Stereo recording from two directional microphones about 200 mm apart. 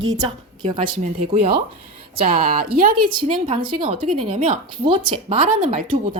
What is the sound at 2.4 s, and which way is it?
Speech, 45° right (ahead or behind).